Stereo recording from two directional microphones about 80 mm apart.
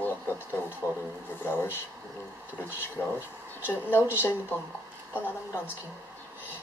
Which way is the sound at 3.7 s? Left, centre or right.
Left.